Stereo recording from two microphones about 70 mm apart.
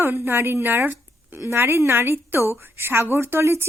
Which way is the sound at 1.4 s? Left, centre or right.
Right.